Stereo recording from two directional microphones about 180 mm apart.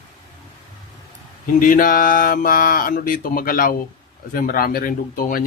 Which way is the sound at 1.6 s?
50° left (ahead or behind).